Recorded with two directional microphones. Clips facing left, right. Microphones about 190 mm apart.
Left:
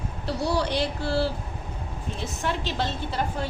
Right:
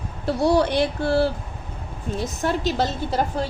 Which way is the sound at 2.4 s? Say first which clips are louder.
Right 6 dB; 40° right (ahead or behind).